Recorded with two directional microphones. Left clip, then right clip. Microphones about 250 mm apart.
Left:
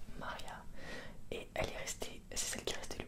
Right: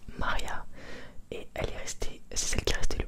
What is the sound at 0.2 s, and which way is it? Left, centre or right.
Whispering, right.